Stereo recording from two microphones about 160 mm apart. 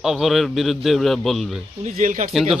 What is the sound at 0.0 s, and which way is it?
A man's voice, centre (ahead or behind).